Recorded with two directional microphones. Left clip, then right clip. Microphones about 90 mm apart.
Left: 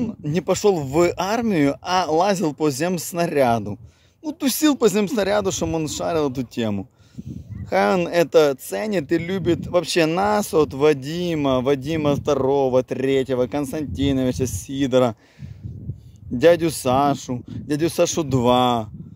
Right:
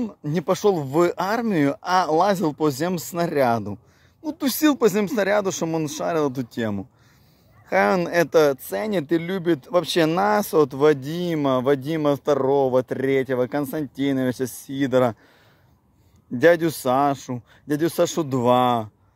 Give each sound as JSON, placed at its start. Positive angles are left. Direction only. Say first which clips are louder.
{"t": 0.0, "sound": "speech", "louder": "left 2 dB", "side_deg": 40}
{"t": 6.5, "sound": "speech", "louder": "left 2 dB", "side_deg": 55}
{"t": 7.7, "sound": "speech", "louder": "left 1 dB", "side_deg": 35}
{"t": 16.3, "sound": "speech", "louder": "left 1 dB", "side_deg": 40}
{"t": 17.5, "sound": "speech", "louder": "even", "side_deg": 40}